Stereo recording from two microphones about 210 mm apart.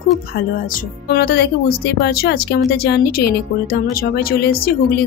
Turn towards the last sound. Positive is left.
turn(degrees=45)  # may be behind; listen again after turning